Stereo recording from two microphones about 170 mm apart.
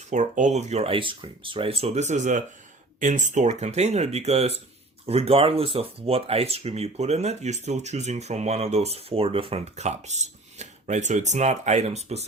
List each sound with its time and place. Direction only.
0.1 s speech: 45° right (ahead or behind)